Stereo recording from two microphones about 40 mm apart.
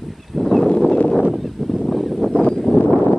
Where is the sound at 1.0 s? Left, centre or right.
Left.